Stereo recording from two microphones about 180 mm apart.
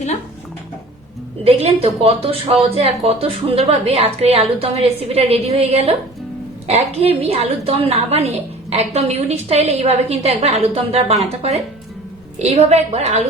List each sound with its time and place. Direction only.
1.5 s a woman's voice: 35° right (ahead or behind)
12.4 s a woman's voice: 35° right (ahead or behind)